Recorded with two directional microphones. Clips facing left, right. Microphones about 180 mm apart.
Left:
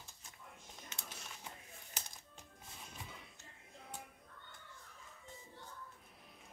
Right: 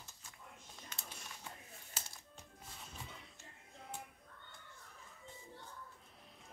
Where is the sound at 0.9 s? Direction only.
20° left (ahead or behind).